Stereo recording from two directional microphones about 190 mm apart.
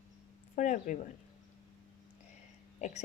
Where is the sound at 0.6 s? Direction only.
40° left (ahead or behind).